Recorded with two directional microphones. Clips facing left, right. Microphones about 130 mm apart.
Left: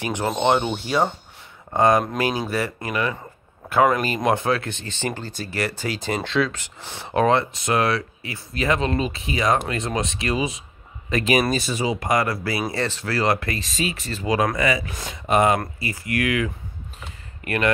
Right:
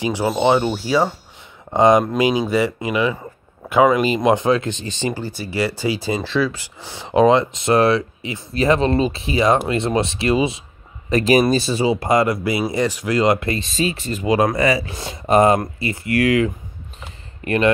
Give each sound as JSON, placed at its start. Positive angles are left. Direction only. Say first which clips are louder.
{"t": 0.0, "sound": "speech", "louder": "right 4 dB", "side_deg": -10}
{"t": 1.7, "sound": "speech", "louder": "right 4 dB", "side_deg": -20}
{"t": 7.7, "sound": "speech", "louder": "right 6 dB", "side_deg": -30}
{"t": 15.6, "sound": "speech", "louder": "right 5 dB", "side_deg": -25}